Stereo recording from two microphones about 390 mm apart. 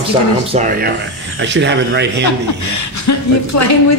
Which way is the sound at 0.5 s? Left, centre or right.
Right.